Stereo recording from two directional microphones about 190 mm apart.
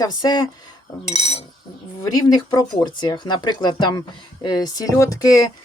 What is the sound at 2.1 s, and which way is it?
Speech, 20° left (ahead or behind).